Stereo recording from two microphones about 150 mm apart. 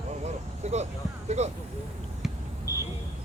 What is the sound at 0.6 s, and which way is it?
Speech, 50° right (ahead or behind).